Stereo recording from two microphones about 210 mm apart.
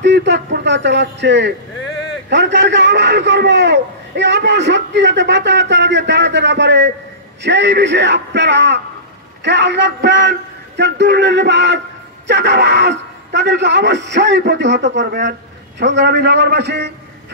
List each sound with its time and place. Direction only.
0.0 s a man's voice: 55° right (ahead or behind)